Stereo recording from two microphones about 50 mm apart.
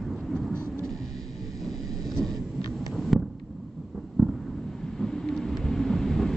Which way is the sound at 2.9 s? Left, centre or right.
Centre.